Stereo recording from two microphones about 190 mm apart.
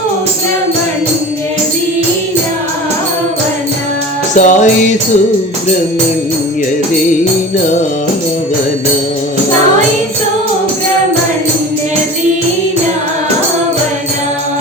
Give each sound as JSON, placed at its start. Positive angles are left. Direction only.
{"t": 4.4, "sound": "music", "side_deg": 40}